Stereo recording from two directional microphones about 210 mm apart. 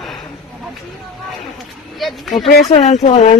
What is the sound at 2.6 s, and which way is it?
Speech, 30° left (ahead or behind).